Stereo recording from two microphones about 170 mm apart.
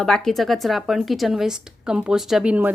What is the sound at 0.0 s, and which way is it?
Speech, centre (ahead or behind).